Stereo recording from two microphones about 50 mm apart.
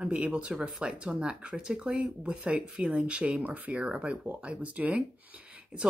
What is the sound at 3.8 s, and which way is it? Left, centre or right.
Speech, right.